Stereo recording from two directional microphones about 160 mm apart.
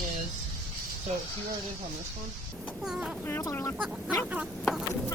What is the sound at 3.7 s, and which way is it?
Speech, 5° right (ahead or behind).